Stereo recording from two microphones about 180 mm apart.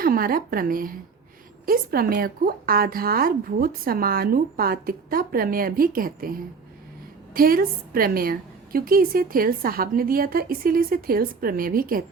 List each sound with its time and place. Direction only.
0.0 s speech: 55° right (ahead or behind)
7.3 s a woman's voice: 55° right (ahead or behind)